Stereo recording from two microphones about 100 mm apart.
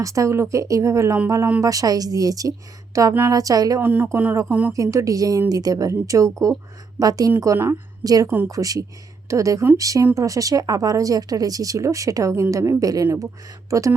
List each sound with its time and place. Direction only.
0.0 s speech: 35° right (ahead or behind)
3.8 s a woman's voice: 20° right (ahead or behind)
4.7 s speech: 30° right (ahead or behind)